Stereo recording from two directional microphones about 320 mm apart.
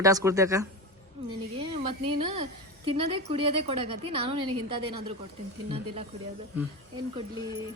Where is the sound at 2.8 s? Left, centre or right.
Centre.